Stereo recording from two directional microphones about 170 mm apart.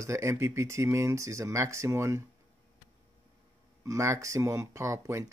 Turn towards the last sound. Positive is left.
turn(degrees=-15)  # may be behind; listen again after turning